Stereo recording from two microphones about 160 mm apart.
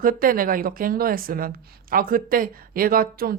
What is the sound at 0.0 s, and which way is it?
Speech, 60° right (ahead or behind).